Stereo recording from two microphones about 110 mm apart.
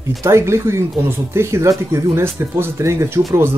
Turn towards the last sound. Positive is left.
turn(degrees=-25)  # may be behind; listen again after turning